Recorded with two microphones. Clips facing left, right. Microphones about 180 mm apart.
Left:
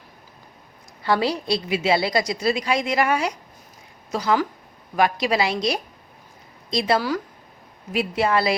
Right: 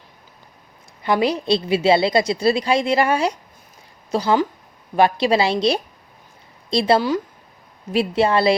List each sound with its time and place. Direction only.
1.0 s a woman's voice: 20° right (ahead or behind)